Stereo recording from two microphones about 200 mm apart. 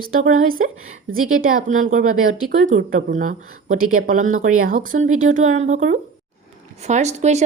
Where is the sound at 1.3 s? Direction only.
45° right (ahead or behind).